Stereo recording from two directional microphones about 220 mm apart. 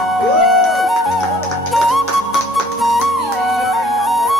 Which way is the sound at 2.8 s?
Centre (ahead or behind).